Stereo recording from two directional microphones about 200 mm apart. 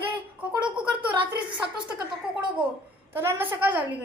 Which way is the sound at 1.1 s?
25° right (ahead or behind).